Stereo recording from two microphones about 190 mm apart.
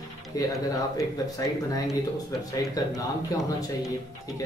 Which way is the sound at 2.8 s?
20° left (ahead or behind).